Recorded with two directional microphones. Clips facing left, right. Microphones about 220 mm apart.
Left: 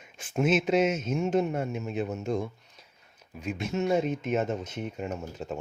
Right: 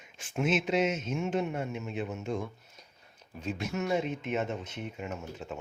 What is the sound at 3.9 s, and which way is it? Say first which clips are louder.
A man's voice: left 5 dB; 40° left (ahead or behind).